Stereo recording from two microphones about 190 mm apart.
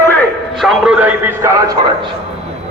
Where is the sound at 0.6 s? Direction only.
Centre (ahead or behind); by 2.0 s 20° right (ahead or behind).